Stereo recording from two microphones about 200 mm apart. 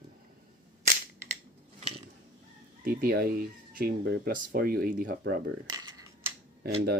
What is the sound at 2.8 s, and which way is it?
Speech, 45° right (ahead or behind).